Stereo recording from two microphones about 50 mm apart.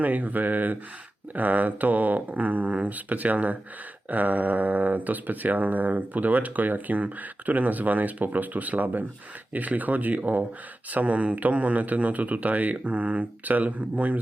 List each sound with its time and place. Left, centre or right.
0.0 s speech: right